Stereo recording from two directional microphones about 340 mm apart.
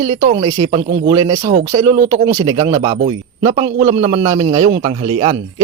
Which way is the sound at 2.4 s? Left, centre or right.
Centre.